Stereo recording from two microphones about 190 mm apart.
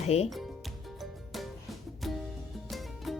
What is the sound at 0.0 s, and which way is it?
Speech, 35° left (ahead or behind).